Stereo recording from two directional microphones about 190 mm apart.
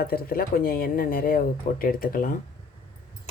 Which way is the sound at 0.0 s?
50° left (ahead or behind).